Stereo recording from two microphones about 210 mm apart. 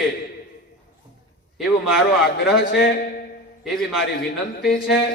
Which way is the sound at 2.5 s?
50° left (ahead or behind).